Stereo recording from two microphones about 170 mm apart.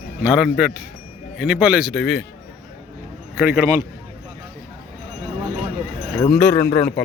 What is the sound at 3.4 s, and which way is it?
Speech, 10° right (ahead or behind).